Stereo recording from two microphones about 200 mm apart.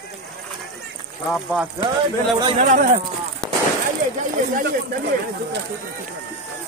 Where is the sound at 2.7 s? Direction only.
40° right (ahead or behind).